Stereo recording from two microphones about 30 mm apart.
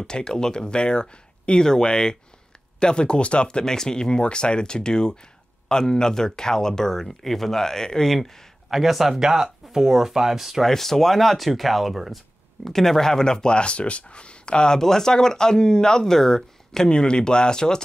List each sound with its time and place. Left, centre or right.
0.0 s speech: left
3.4 s speech: left
8.6 s speech: centre
9.2 s speech: centre
10.7 s speech: centre
12.6 s speech: centre; by 14.8 s left
14.8 s speech: centre
16.9 s speech: left